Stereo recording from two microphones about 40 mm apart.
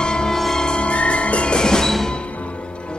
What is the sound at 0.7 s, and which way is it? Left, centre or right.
Music, left.